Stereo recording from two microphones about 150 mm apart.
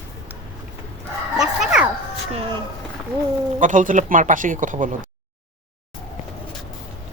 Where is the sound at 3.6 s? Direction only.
60° right (ahead or behind).